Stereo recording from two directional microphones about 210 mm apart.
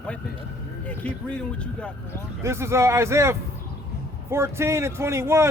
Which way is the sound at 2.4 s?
15° right (ahead or behind).